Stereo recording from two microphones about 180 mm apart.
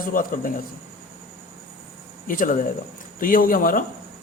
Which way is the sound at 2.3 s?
50° left (ahead or behind).